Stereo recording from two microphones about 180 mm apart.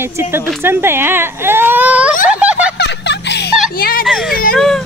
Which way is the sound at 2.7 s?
70° left (ahead or behind).